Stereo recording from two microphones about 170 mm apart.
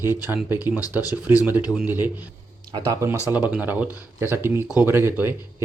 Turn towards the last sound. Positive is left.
turn(degrees=-15)  # may be behind; listen again after turning